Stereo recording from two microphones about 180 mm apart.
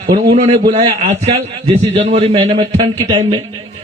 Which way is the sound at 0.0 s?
25° right (ahead or behind).